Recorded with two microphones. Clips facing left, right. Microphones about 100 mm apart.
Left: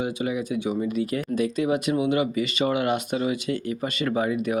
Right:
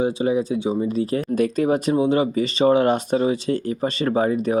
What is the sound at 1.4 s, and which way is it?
Speech, 45° right (ahead or behind).